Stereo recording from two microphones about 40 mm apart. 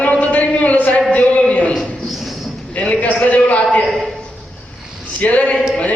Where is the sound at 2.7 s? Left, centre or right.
Left.